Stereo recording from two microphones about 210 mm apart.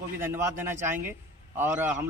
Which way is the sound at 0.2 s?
10° right (ahead or behind).